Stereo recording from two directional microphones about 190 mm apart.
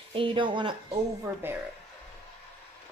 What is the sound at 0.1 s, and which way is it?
Speech, 25° right (ahead or behind).